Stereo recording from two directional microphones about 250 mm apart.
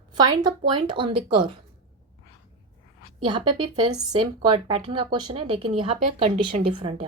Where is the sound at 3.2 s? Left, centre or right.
Centre.